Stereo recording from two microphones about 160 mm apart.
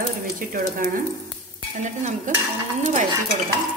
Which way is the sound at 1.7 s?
45° right (ahead or behind).